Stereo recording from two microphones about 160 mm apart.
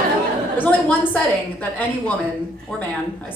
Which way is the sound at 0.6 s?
10° left (ahead or behind).